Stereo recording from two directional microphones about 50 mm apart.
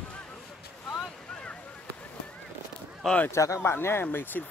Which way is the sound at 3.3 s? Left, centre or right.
Left.